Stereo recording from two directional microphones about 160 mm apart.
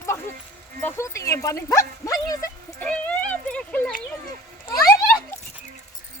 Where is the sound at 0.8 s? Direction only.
20° left (ahead or behind).